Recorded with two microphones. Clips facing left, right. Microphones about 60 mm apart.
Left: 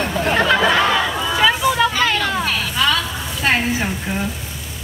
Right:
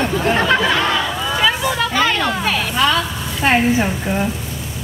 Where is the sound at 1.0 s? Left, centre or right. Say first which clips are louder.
Left 1 dB; centre.